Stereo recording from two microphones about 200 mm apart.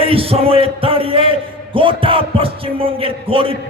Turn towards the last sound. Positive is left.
turn(degrees=-25)  # may be behind; listen again after turning